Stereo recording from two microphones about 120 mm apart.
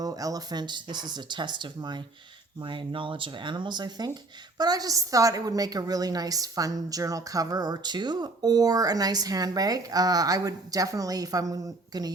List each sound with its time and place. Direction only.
0.0 s speech: 30° right (ahead or behind)